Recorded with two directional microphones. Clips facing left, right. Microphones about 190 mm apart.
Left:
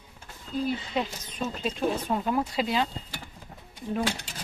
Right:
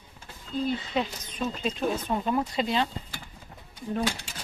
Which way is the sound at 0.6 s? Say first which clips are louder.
Right 1 dB; 5° left (ahead or behind).